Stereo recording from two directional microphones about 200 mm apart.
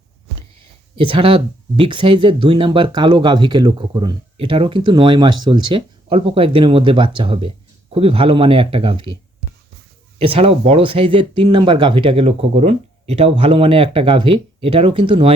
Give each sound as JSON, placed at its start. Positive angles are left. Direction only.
{"t": 0.9, "sound": "speech", "side_deg": -25}
{"t": 10.2, "sound": "speech", "side_deg": -30}